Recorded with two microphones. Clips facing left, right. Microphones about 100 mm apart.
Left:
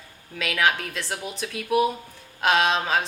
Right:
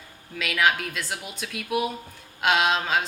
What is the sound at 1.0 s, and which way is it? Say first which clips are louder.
Speech: left 2 dB; 35° left (ahead or behind).